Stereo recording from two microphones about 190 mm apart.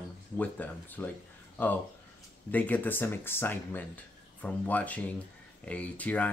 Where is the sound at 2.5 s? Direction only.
10° left (ahead or behind).